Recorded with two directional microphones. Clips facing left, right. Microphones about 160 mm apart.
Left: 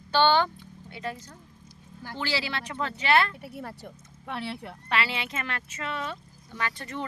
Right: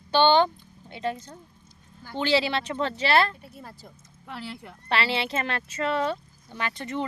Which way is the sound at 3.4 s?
70° left (ahead or behind).